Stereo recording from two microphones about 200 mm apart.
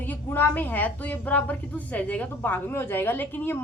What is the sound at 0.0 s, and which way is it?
A woman's voice, 10° left (ahead or behind).